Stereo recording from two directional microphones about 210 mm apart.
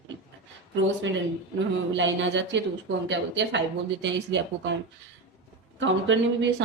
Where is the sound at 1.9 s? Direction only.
60° right (ahead or behind).